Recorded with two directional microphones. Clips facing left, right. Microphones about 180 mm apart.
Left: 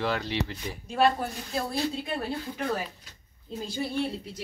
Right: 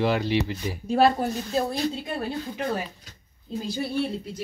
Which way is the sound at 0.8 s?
35° right (ahead or behind).